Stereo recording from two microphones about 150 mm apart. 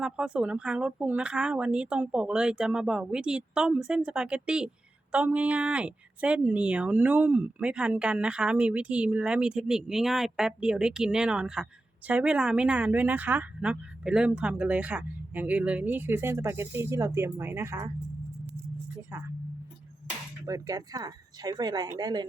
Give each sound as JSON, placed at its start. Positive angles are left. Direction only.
{"t": 0.0, "sound": "speech", "side_deg": -5}
{"t": 19.1, "sound": "speech", "side_deg": -15}
{"t": 20.5, "sound": "speech", "side_deg": -25}